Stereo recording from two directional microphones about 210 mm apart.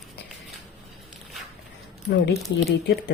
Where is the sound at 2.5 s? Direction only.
55° left (ahead or behind).